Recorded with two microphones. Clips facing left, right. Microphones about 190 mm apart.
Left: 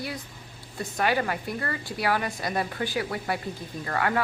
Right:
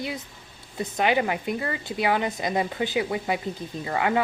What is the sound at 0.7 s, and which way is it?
A woman's voice, 20° right (ahead or behind).